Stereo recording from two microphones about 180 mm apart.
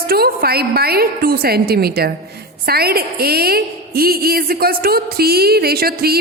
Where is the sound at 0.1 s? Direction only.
60° right (ahead or behind).